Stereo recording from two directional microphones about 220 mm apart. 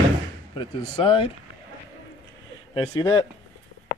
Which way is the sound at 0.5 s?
20° left (ahead or behind).